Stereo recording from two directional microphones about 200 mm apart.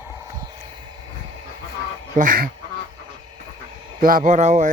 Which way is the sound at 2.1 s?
40° right (ahead or behind).